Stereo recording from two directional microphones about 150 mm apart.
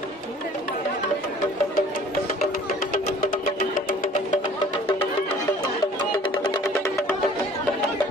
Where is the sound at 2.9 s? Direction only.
65° left (ahead or behind).